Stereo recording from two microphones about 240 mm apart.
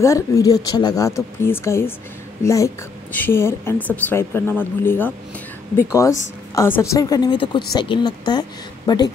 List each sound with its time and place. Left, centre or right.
0.0 s a woman's voice: centre
6.5 s a woman's voice: centre